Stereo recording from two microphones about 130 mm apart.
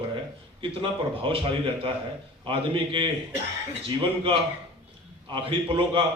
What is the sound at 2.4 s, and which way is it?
Speech, 40° right (ahead or behind).